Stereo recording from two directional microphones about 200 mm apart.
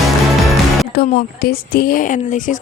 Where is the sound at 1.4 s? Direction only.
50° left (ahead or behind).